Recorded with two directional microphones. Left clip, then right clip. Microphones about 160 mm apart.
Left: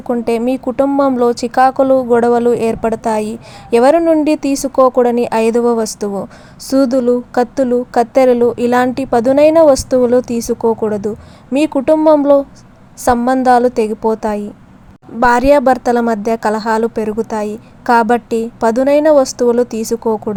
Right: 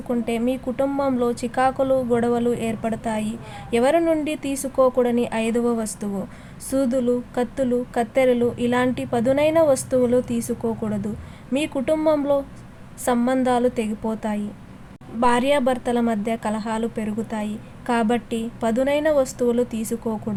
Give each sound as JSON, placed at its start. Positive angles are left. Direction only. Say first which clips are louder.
{"t": 0.3, "sound": "a woman's voice", "louder": "left 9 dB", "side_deg": 40}